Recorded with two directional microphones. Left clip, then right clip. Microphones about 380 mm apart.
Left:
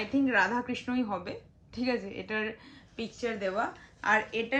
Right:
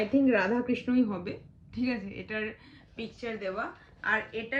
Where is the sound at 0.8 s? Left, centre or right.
Right.